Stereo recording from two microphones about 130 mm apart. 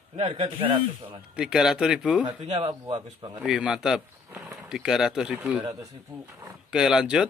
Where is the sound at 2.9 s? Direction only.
40° right (ahead or behind).